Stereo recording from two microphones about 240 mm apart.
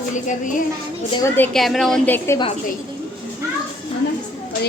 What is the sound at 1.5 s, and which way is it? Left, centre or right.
Speech, centre.